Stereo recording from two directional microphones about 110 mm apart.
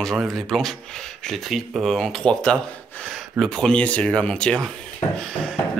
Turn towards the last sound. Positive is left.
turn(degrees=5)  # may be behind; listen again after turning